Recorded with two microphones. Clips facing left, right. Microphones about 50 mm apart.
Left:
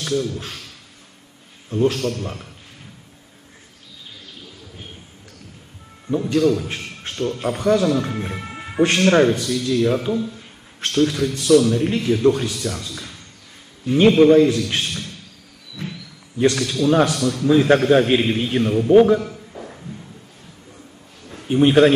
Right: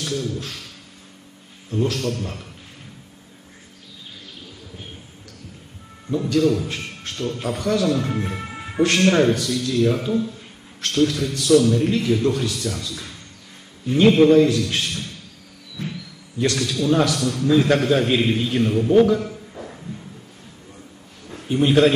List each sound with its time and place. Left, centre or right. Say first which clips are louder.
0.0 s a man's voice: left 3 dB; left
1.7 s a man's voice: left 3 dB; left
6.1 s a man's voice: left 1 dB; left
8.5 s music: left 4 dB; centre
8.8 s a man's voice: left 2 dB; left
16.3 s a man's voice: left 3 dB; left
19.5 s music: even; centre
21.4 s a man's voice: left 3 dB; left